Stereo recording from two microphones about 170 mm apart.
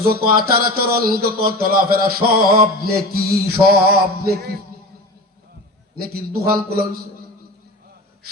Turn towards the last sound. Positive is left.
turn(degrees=-60)  # may be behind; listen again after turning